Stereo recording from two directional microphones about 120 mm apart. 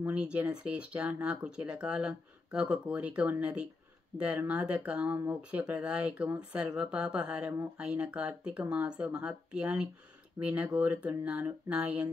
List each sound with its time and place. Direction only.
0.0 s speech: 10° right (ahead or behind)